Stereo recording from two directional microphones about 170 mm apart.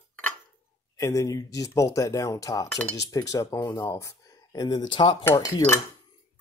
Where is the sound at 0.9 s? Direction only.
20° left (ahead or behind).